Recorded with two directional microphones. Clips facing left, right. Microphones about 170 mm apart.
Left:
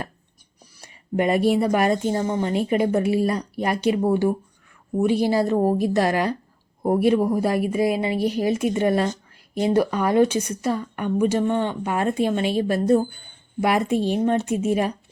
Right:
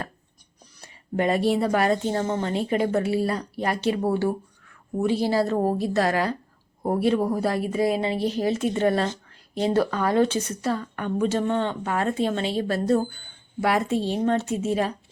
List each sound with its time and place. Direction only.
0.6 s speech: 15° left (ahead or behind)